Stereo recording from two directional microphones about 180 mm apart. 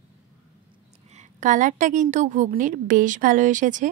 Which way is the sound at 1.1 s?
40° right (ahead or behind).